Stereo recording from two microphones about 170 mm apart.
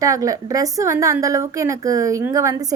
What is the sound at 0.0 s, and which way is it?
A woman's voice, 20° right (ahead or behind).